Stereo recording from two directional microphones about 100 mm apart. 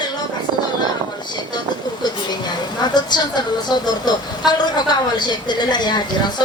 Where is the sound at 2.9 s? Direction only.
45° left (ahead or behind).